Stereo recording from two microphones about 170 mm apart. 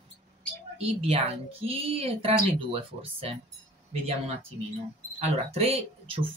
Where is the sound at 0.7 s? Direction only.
35° right (ahead or behind).